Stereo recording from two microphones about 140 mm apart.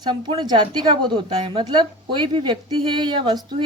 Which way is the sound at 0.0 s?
30° right (ahead or behind).